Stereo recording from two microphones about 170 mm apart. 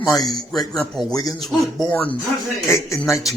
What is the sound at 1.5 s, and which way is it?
Speech, centre (ahead or behind).